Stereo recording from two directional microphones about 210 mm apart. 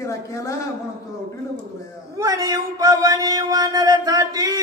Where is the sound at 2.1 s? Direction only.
15° right (ahead or behind).